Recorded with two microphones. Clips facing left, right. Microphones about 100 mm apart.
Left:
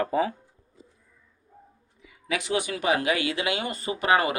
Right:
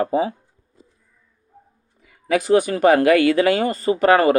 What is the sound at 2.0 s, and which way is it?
Speech, 45° right (ahead or behind).